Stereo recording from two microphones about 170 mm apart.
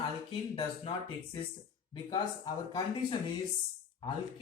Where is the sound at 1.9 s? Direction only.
25° left (ahead or behind).